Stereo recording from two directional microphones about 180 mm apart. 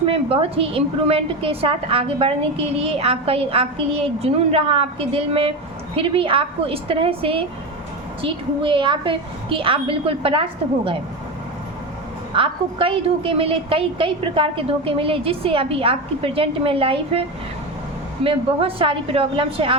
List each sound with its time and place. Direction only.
0.0 s a woman's voice: 30° right (ahead or behind)
12.3 s a woman's voice: 30° right (ahead or behind)